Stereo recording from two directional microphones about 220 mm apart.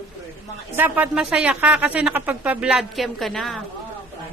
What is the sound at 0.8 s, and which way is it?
Speech, 10° right (ahead or behind).